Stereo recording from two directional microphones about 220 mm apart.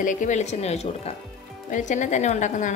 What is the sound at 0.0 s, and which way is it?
A woman's voice, 35° left (ahead or behind).